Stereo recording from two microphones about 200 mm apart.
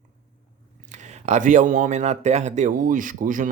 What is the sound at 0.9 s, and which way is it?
Speech, 35° right (ahead or behind).